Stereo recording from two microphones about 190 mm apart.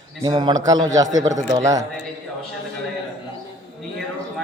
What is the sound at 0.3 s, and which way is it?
A man's voice, 25° right (ahead or behind).